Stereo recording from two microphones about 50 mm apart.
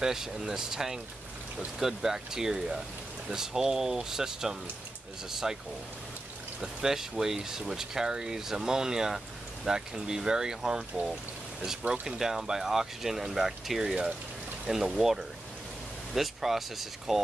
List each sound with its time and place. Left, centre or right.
0.0 s speech: centre
11.9 s speech: right
12.2 s speech: centre